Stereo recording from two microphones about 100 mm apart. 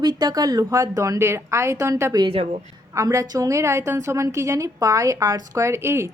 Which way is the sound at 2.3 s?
80° right.